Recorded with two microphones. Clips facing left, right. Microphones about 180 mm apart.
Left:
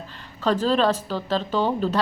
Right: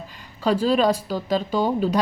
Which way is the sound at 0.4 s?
10° right (ahead or behind).